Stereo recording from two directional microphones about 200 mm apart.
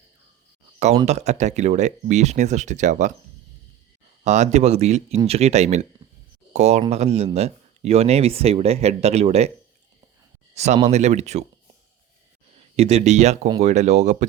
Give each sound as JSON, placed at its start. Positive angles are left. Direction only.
{"t": 1.0, "sound": "speech", "side_deg": -35}
{"t": 4.2, "sound": "speech", "side_deg": -35}
{"t": 10.5, "sound": "speech", "side_deg": -35}
{"t": 12.5, "sound": "speech", "side_deg": -30}